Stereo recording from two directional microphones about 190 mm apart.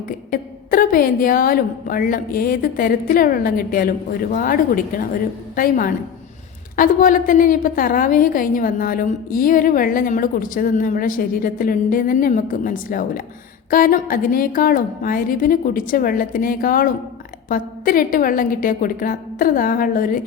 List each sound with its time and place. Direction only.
0.3 s a woman's voice: 50° left (ahead or behind)